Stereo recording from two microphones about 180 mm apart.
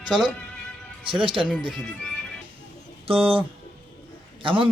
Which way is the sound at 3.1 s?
30° right (ahead or behind).